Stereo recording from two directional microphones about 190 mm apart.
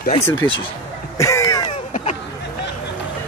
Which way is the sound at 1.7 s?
35° left (ahead or behind).